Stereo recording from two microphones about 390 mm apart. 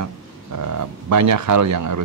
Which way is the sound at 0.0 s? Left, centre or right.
Right.